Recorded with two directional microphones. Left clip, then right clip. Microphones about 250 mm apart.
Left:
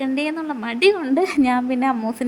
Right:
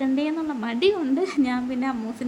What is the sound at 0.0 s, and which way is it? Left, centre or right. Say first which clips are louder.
A woman's voice: left 2 dB; left.